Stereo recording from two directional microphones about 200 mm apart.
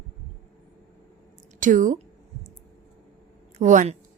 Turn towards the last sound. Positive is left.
turn(degrees=-40)  # may be behind; listen again after turning